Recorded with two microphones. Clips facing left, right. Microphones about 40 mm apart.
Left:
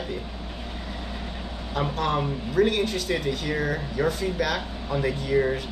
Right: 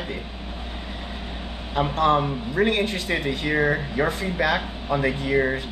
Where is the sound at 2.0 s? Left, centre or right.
Right.